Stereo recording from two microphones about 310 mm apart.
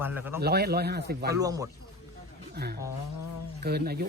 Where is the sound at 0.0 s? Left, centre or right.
Centre.